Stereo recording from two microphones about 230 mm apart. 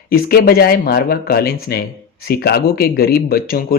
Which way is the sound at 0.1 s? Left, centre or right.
Left.